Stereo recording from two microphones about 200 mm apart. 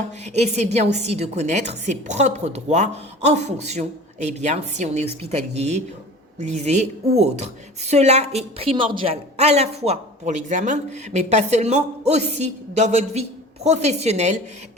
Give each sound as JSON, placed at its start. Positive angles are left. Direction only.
{"t": 0.3, "sound": "a woman's voice", "side_deg": -35}